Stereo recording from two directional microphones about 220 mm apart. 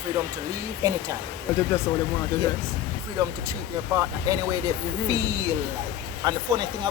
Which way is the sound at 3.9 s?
15° right (ahead or behind).